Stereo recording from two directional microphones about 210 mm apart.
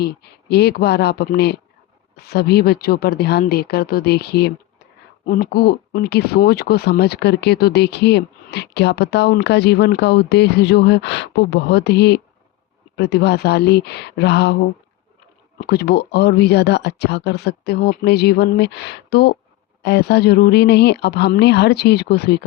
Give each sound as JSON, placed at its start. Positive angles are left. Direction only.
{"t": 0.0, "sound": "speech", "side_deg": 50}